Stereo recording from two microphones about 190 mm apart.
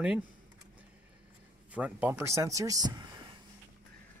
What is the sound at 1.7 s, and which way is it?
Speech, 5° right (ahead or behind).